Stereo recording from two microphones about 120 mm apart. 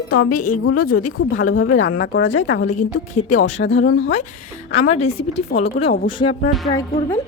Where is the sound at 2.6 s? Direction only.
90° left; by 6.3 s 45° left (ahead or behind).